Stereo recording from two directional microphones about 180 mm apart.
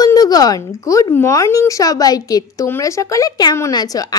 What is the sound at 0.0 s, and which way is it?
Speech, 20° left (ahead or behind).